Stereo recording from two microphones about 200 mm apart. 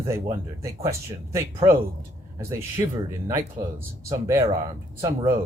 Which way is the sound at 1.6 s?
25° right (ahead or behind).